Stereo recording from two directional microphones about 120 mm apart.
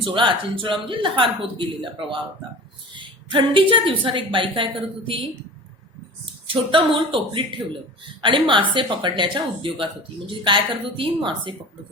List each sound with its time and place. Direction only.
0.0 s speech: 45° right (ahead or behind)
6.5 s speech: 45° right (ahead or behind)